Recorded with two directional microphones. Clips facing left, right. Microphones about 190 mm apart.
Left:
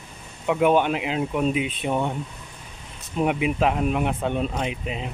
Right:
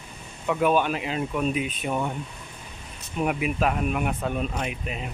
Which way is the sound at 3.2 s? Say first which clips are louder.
Left 3 dB; 30° left (ahead or behind).